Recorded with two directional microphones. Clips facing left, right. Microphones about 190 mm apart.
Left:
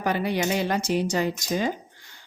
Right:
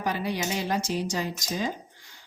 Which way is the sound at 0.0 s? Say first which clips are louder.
Left 4 dB; 60° left (ahead or behind).